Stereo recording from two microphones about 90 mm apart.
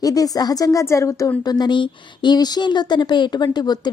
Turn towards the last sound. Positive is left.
turn(degrees=50)  # may be behind; listen again after turning